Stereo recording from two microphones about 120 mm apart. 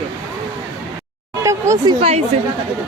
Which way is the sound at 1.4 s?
25° right (ahead or behind).